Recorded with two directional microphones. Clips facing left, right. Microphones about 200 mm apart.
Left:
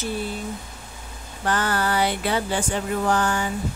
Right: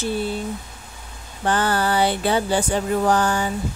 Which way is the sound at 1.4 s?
30° right (ahead or behind).